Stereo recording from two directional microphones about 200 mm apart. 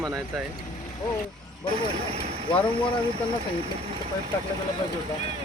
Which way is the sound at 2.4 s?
25° left (ahead or behind).